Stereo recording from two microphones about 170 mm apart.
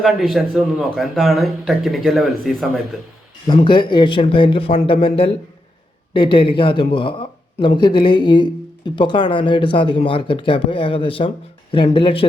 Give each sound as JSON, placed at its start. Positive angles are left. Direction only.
{"t": 0.0, "sound": "speech", "side_deg": 0}
{"t": 3.4, "sound": "speech", "side_deg": 25}